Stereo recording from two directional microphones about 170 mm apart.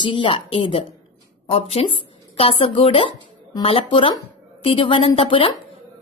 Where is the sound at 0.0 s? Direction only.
30° left (ahead or behind).